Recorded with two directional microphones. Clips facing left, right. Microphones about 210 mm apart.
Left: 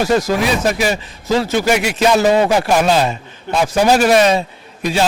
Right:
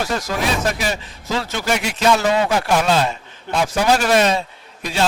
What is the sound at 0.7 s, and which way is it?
A man's voice, 10° left (ahead or behind).